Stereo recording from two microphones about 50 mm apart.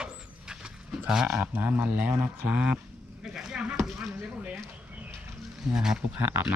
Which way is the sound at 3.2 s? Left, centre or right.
Centre.